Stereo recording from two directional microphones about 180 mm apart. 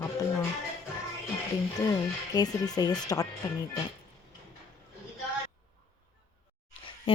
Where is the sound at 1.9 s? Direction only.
20° left (ahead or behind).